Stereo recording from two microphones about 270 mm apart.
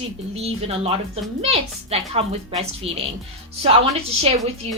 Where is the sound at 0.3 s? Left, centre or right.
Right.